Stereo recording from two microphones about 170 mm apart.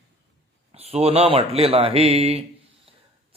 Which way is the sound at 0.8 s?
35° right (ahead or behind).